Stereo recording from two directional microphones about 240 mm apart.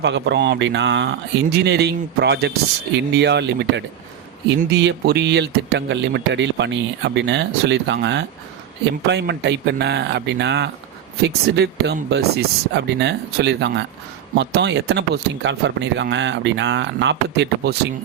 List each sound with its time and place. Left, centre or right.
0.0 s speech: right